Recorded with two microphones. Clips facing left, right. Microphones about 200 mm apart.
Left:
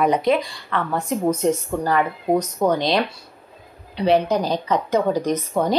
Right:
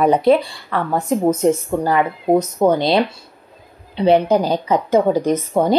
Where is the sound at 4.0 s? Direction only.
30° right (ahead or behind).